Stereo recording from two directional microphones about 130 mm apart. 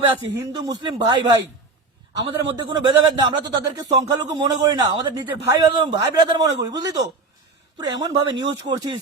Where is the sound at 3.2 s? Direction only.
30° right (ahead or behind).